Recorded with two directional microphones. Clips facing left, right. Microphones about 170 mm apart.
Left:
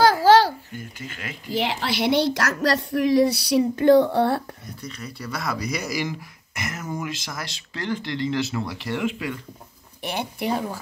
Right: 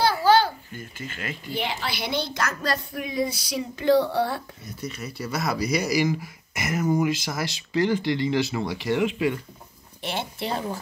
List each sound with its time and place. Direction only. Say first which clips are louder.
0.0 s babbling: left 4 dB; 90° left
0.7 s speech: even; 10° left (ahead or behind)
1.5 s speech: left 5 dB; 85° left; by 4.4 s 60° left (ahead or behind)
4.8 s speech: right 3 dB; 5° right (ahead or behind)
5.3 s speech: right 2 dB; 20° right (ahead or behind)
5.6 s speech: right 4 dB; 5° right (ahead or behind)
10.0 s speech: left 3 dB; 15° left (ahead or behind)